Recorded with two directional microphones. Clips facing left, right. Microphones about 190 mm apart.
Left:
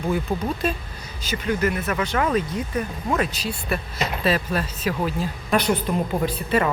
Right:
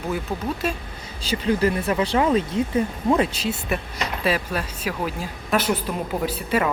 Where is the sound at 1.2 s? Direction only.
30° right (ahead or behind).